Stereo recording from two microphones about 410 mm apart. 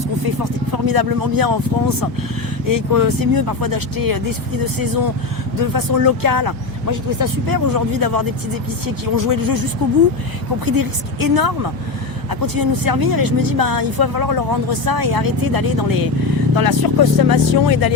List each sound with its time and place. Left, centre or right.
0.3 s speech: right
2.6 s speech: right
10.7 s speech: right